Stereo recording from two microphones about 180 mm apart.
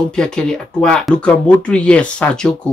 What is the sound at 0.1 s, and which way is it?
Speech, 5° left (ahead or behind).